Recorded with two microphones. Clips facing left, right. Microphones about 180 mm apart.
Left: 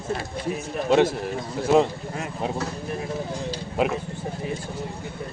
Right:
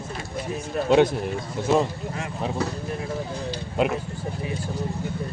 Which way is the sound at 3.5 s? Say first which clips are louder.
Right 1 dB; 5° left (ahead or behind).